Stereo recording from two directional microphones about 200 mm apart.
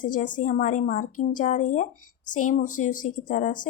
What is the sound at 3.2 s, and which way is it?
Speech, 40° left (ahead or behind).